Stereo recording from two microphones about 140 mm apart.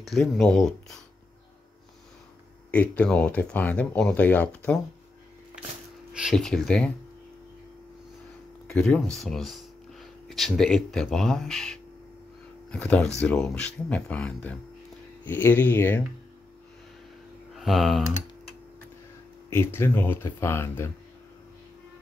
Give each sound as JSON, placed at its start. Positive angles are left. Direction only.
{"t": 0.0, "sound": "speech", "side_deg": 0}
{"t": 2.7, "sound": "speech", "side_deg": 10}
{"t": 6.1, "sound": "speech", "side_deg": 0}
{"t": 8.7, "sound": "speech", "side_deg": 5}
{"t": 17.6, "sound": "speech", "side_deg": 0}
{"t": 19.5, "sound": "speech", "side_deg": 20}